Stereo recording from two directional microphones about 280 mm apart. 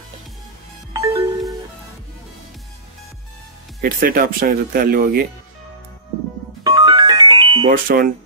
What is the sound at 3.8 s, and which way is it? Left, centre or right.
Speech, right.